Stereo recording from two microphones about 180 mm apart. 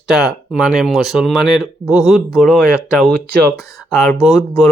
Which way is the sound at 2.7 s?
15° left (ahead or behind).